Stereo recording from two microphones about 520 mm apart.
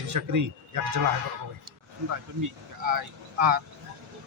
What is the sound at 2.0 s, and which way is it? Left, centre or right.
Speech, right.